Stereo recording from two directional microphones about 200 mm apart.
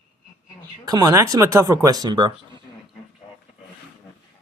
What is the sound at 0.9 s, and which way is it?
Speech, 20° right (ahead or behind).